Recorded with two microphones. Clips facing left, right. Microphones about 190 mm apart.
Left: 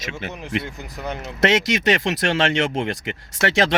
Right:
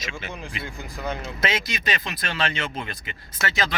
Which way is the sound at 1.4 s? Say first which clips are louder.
Left 10 dB; 80° left.